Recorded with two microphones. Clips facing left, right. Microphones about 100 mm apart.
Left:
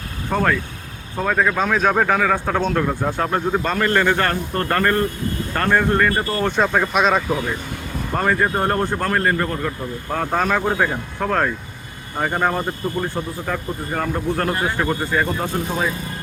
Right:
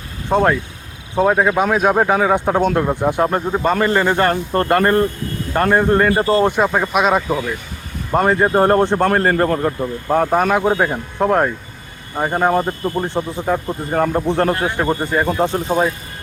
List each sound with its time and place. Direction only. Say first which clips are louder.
0.3 s a man's voice: right 5 dB; 25° right (ahead or behind)
6.6 s speech: right 2 dB; 10° right (ahead or behind)
8.1 s a man's voice: right 5 dB; 25° right (ahead or behind)
10.1 s a man's voice: right 5 dB; 20° right (ahead or behind)
14.6 s a man's voice: right 3 dB; 20° right (ahead or behind)